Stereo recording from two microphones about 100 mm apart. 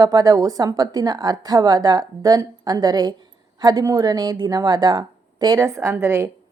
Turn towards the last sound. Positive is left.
turn(degrees=-25)  # may be behind; listen again after turning